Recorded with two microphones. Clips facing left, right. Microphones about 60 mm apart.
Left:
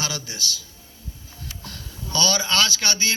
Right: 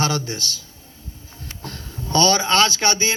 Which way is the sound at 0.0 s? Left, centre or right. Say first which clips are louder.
Right 7 dB; right.